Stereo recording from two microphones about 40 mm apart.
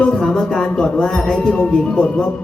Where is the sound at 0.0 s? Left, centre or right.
Centre.